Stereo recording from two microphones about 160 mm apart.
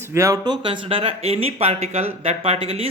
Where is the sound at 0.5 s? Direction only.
30° right (ahead or behind).